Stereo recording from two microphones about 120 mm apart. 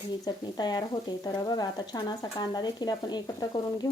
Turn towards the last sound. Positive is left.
turn(degrees=35)  # may be behind; listen again after turning